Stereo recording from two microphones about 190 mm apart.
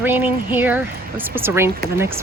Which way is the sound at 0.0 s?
10° right (ahead or behind).